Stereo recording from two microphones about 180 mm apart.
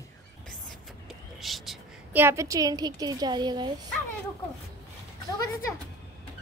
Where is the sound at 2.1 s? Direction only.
15° right (ahead or behind).